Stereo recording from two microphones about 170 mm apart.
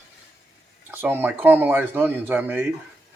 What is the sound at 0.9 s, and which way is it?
Speech, 10° right (ahead or behind).